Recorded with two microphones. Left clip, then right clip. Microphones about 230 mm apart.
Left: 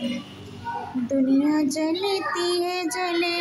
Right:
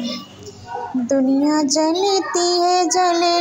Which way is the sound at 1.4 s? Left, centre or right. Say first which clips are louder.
Right 5 dB; centre.